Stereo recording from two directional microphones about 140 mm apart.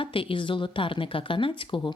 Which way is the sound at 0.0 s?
40° left (ahead or behind).